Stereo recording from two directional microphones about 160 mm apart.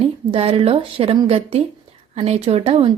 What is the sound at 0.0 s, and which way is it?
A woman's voice, 35° right (ahead or behind).